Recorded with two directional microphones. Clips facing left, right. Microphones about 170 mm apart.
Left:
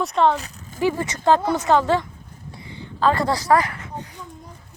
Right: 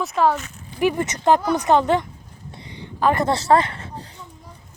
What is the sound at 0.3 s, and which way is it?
Speech, 35° left (ahead or behind).